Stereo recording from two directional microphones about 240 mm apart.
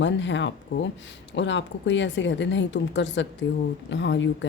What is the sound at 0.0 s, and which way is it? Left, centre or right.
Speech, left.